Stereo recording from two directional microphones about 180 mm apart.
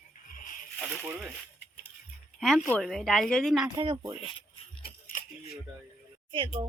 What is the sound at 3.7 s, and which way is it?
Speech, 30° right (ahead or behind).